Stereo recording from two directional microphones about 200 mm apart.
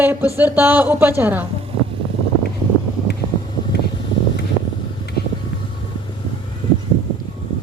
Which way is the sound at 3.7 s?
55° left (ahead or behind).